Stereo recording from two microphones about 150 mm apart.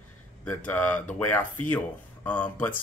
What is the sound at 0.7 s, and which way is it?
Speech, 10° left (ahead or behind).